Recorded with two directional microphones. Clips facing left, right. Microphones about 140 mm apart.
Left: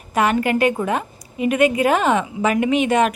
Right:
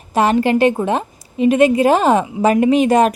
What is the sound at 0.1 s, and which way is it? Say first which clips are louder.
A woman's voice: right 4 dB; 30° right (ahead or behind).